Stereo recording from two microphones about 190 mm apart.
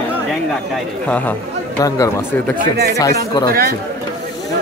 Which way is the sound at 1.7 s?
20° left (ahead or behind).